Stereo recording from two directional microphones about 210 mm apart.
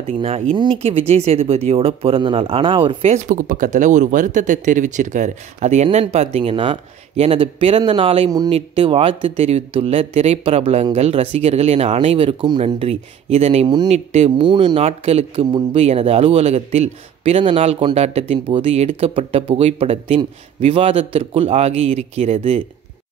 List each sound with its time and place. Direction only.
0.0 s speech: 30° right (ahead or behind)